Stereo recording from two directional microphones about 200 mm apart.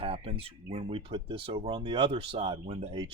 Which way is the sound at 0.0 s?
30° right (ahead or behind).